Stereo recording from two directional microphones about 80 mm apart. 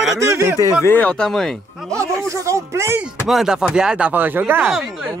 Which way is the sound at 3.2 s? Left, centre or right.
Centre.